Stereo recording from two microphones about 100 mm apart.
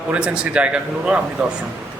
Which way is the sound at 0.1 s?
10° right (ahead or behind).